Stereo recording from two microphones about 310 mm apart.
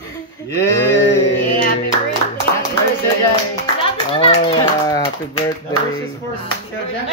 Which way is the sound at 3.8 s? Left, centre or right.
Centre.